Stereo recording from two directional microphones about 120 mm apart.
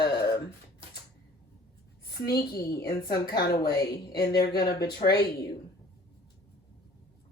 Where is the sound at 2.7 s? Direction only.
30° left (ahead or behind).